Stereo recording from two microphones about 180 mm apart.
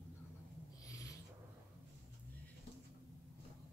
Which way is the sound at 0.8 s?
20° left (ahead or behind).